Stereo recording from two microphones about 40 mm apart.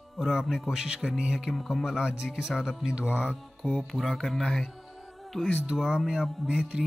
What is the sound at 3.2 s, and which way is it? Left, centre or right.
Music, left.